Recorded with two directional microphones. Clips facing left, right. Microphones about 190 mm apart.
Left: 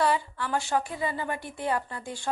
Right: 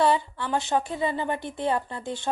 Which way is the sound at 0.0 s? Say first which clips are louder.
Right 3 dB; 25° right (ahead or behind).